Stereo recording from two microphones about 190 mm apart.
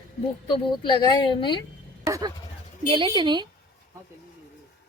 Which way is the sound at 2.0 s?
20° right (ahead or behind).